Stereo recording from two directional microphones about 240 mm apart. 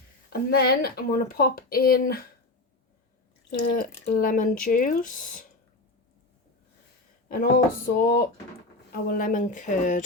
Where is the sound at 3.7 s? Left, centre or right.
Left.